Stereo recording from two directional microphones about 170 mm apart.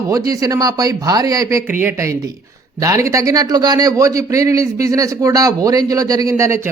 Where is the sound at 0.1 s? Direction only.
20° right (ahead or behind).